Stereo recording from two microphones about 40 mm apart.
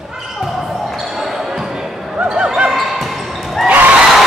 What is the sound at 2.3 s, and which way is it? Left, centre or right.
Basketball bounce, right.